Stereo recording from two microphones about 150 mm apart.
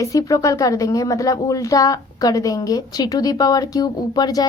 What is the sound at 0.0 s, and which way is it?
A woman's voice, 25° left (ahead or behind).